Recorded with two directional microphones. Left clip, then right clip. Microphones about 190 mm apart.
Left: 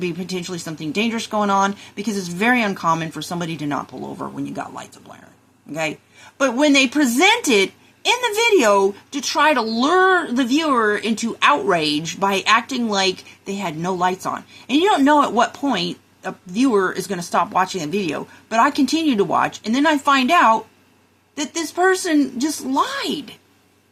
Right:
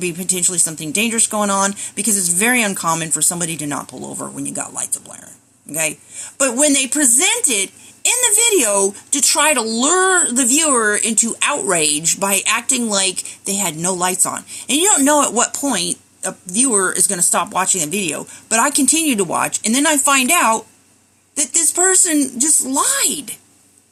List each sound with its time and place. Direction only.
0.0 s speech: 20° right (ahead or behind)
6.4 s speech: 15° right (ahead or behind)